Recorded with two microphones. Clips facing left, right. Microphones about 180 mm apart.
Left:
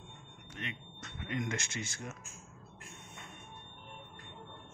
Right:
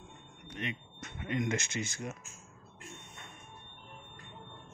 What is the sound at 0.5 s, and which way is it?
Vehicle, 15° right (ahead or behind).